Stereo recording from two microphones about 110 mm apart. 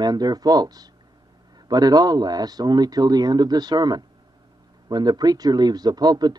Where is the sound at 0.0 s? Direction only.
40° right (ahead or behind).